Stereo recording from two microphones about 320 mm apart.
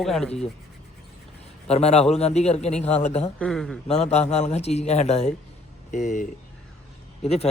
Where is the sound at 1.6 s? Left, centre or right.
Centre.